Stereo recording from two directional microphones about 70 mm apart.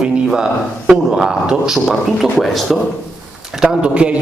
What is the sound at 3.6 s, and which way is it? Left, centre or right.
Speech, centre.